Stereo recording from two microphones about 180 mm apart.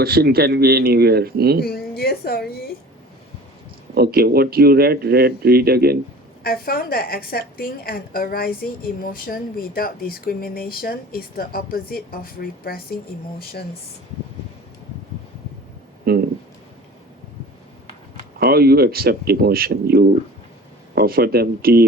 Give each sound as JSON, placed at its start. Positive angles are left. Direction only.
{"t": 0.0, "sound": "speech", "side_deg": -60}
{"t": 1.6, "sound": "a woman's voice", "side_deg": 60}
{"t": 3.9, "sound": "speech", "side_deg": -60}
{"t": 6.4, "sound": "a woman's voice", "side_deg": 55}
{"t": 16.1, "sound": "speech", "side_deg": -55}
{"t": 18.3, "sound": "speech", "side_deg": -60}